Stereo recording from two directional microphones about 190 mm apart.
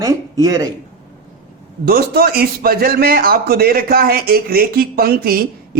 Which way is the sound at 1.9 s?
55° right (ahead or behind).